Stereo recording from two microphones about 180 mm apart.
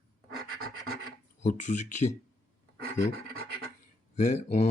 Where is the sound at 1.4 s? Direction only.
45° left (ahead or behind).